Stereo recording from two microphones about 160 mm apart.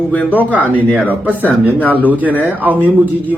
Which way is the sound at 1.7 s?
10° left (ahead or behind).